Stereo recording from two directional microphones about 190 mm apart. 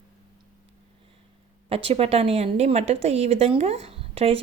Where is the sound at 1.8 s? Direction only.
30° right (ahead or behind).